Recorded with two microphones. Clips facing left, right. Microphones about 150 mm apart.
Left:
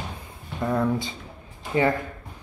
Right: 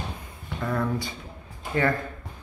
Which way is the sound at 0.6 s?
20° left (ahead or behind).